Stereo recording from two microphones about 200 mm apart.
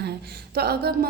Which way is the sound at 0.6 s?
50° right (ahead or behind).